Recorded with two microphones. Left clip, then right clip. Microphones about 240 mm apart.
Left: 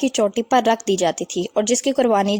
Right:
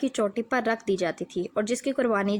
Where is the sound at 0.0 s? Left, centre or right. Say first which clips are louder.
Left 8 dB; left.